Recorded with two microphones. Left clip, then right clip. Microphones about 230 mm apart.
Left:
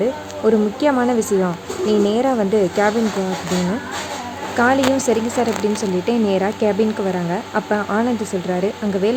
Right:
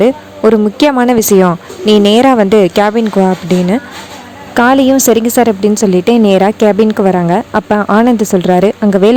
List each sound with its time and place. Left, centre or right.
0.0 s a woman's voice: right
4.5 s a woman's voice: right